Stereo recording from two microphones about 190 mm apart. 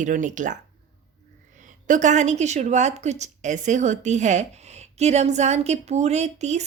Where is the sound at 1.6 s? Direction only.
40° right (ahead or behind).